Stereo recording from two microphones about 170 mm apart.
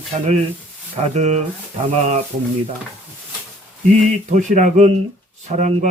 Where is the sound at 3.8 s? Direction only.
45° right (ahead or behind).